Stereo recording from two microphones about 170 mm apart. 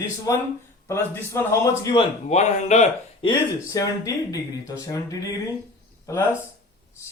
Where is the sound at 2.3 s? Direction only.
45° left (ahead or behind).